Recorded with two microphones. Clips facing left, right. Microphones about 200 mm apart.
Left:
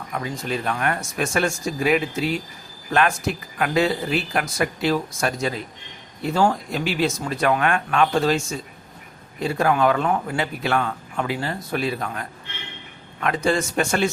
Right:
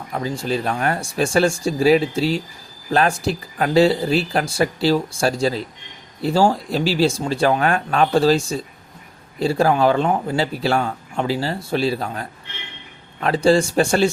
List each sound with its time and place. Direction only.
0.1 s speech: 30° right (ahead or behind)